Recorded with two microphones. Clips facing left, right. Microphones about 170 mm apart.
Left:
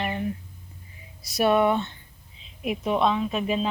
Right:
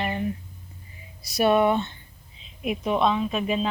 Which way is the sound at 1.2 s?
Centre (ahead or behind).